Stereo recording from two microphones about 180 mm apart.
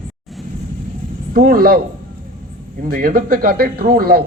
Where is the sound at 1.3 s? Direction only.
55° right (ahead or behind).